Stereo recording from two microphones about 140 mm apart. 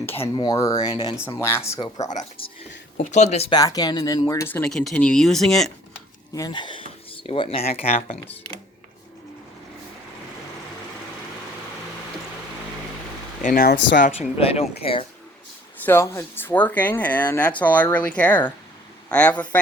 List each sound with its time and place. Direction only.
0.1 s speech: 45° left (ahead or behind)
0.4 s speech: 25° left (ahead or behind)
2.4 s speech: 40° left (ahead or behind)
3.0 s speech: 55° left (ahead or behind)
3.5 s speech: 25° left (ahead or behind)
4.6 s speech: 5° left (ahead or behind)
6.3 s speech: 30° left (ahead or behind); by 8.5 s 45° left (ahead or behind)
13.4 s speech: 70° left (ahead or behind)
14.2 s speech: 45° left (ahead or behind)
15.8 s a man's voice: 15° left (ahead or behind)